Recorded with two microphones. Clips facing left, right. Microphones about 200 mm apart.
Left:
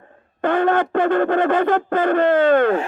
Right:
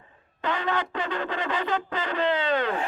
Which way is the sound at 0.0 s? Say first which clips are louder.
Left 9 dB; 55° left (ahead or behind).